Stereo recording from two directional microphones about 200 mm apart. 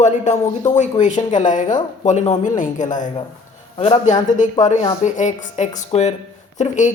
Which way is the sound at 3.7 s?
30° left (ahead or behind).